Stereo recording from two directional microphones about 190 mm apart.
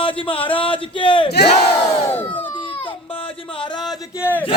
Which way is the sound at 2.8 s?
25° left (ahead or behind).